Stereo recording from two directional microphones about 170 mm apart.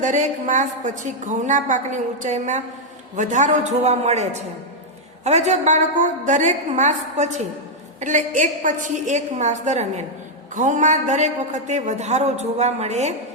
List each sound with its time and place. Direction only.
0.0 s a man's voice: 50° right (ahead or behind)